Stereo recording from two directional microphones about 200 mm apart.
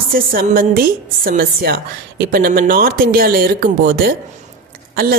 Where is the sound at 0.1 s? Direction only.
45° right (ahead or behind).